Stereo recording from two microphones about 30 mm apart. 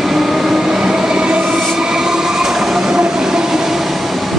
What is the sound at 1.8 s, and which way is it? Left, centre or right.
Train, centre.